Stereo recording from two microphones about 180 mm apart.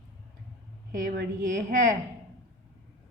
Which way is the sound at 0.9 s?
50° right (ahead or behind).